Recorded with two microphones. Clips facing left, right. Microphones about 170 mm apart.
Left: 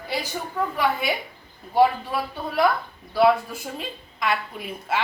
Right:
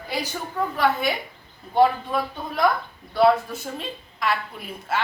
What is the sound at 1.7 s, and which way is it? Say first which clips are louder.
Speech: even; 5° left (ahead or behind).